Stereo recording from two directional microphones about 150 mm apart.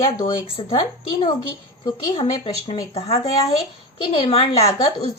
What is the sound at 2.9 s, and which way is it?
A woman's voice, 45° left (ahead or behind).